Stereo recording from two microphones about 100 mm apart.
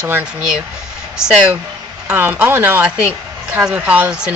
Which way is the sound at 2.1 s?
20° right (ahead or behind).